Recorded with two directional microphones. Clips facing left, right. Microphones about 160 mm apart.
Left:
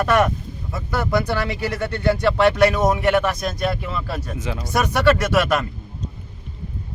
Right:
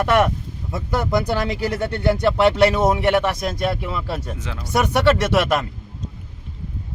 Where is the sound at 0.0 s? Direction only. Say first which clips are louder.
Even; 25° right (ahead or behind).